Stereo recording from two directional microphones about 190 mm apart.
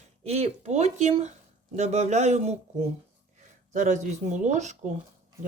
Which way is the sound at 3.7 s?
40° right (ahead or behind).